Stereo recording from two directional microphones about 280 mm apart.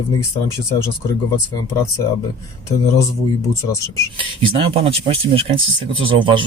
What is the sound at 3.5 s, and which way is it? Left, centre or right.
Speech, centre.